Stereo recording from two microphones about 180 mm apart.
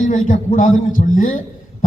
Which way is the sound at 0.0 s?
45° left (ahead or behind).